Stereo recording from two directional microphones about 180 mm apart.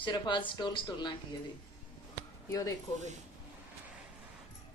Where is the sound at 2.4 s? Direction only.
20° left (ahead or behind).